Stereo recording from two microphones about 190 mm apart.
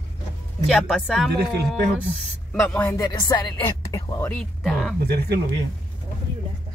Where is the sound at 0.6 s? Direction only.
Centre (ahead or behind).